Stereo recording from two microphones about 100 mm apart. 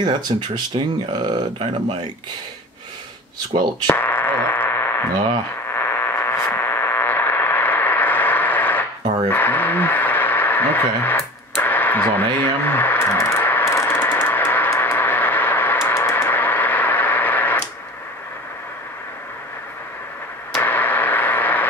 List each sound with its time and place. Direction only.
0.0 s speech: 50° right (ahead or behind)
1.6 s speech: 60° right (ahead or behind)
3.8 s radio: 20° left (ahead or behind)
9.3 s a sound: 20° left (ahead or behind)
12.4 s speech: 20° left (ahead or behind)
13.7 s a sound: 25° left (ahead or behind)
20.6 s radio: 20° left (ahead or behind)